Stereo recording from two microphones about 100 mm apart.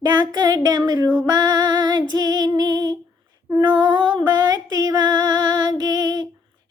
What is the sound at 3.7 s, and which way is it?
Music, 45° right (ahead or behind).